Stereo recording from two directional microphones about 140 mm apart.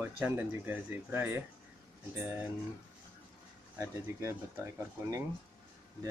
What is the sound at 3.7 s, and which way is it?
Speech, 20° right (ahead or behind).